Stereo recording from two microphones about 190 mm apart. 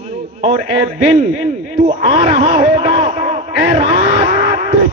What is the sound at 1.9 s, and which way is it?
Speech, 30° right (ahead or behind).